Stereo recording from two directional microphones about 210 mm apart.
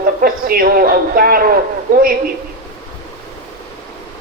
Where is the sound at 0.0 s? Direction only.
45° right (ahead or behind).